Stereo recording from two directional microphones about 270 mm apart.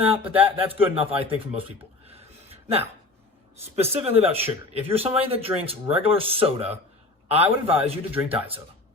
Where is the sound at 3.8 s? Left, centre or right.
Right.